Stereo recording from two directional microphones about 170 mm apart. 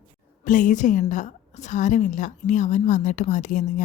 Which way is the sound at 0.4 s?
50° left (ahead or behind).